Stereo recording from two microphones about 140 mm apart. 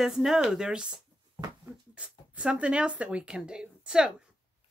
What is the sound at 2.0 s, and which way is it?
Speech, 10° right (ahead or behind).